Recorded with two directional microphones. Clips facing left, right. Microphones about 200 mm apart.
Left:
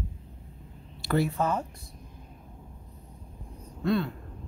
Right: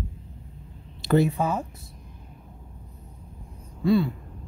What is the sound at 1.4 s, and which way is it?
Speech, 10° right (ahead or behind).